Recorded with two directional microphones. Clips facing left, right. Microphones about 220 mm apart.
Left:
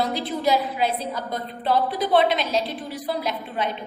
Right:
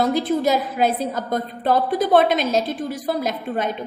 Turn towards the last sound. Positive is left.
turn(degrees=-45)  # may be behind; listen again after turning